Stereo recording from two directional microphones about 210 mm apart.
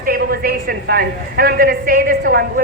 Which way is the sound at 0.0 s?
45° right (ahead or behind).